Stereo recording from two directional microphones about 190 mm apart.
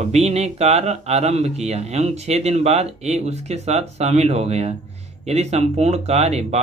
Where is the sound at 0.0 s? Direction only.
35° right (ahead or behind).